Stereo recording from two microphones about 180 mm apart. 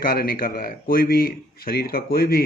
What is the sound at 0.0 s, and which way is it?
Speech, 55° left (ahead or behind).